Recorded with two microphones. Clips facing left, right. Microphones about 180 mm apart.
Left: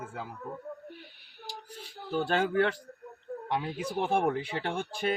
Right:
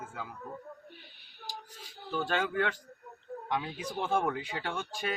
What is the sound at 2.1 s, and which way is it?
Speech, 35° left (ahead or behind).